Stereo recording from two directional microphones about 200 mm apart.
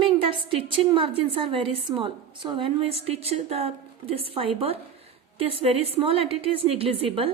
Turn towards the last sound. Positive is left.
turn(degrees=-30)  # may be behind; listen again after turning